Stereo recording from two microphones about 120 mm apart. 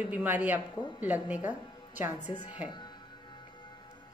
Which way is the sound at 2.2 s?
90° left.